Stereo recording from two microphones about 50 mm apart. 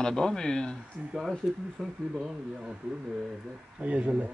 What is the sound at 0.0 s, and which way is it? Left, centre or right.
Speech, centre.